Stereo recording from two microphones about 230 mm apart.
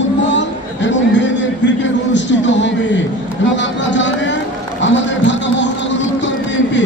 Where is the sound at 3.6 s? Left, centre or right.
Left.